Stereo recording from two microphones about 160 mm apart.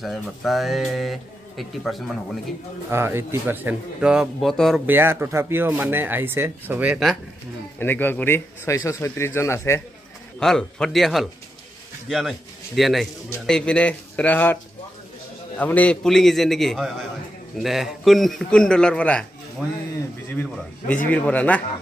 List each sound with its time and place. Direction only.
0.0 s speech: centre (ahead or behind)
2.9 s speech: 15° right (ahead or behind); by 4.8 s centre (ahead or behind)
4.8 s speech: 15° right (ahead or behind)
7.8 s a man's voice: 10° left (ahead or behind)
10.4 s a man's voice: 5° left (ahead or behind)
21.1 s a man's voice: 10° left (ahead or behind)